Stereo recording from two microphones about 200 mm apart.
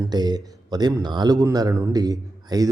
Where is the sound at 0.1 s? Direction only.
20° right (ahead or behind).